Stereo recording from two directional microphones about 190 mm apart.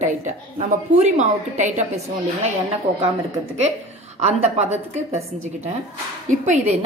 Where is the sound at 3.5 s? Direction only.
35° right (ahead or behind).